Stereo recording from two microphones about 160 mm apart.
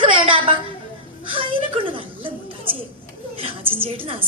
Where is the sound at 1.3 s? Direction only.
35° right (ahead or behind).